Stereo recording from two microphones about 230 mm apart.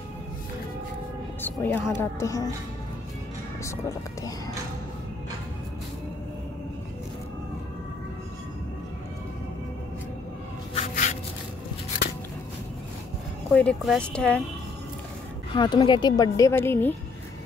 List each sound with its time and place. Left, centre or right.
1.4 s speech: centre
10.7 s a sound: left
13.5 s speech: centre
15.5 s speech: centre